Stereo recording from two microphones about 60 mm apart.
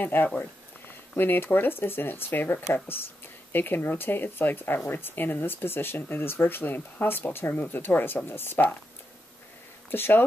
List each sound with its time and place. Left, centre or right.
0.0 s speech: left
0.3 s a sound: left
1.1 s speech: left
9.8 s speech: left